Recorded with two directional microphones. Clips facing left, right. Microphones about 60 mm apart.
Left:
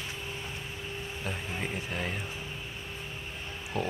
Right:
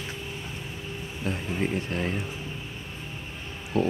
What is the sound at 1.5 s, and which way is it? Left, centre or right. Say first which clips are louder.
Speech: right 9 dB; centre.